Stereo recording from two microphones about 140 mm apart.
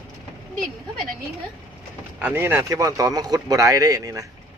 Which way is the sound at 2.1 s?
15° right (ahead or behind).